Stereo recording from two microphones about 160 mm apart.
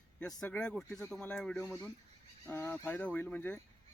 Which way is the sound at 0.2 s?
5° left (ahead or behind).